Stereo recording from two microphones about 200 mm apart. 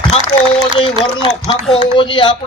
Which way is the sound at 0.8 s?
25° left (ahead or behind).